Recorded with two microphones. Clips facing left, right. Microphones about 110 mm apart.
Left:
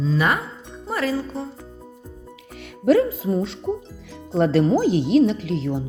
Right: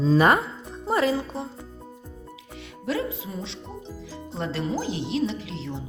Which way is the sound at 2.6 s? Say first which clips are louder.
Left 11 dB; 45° left (ahead or behind).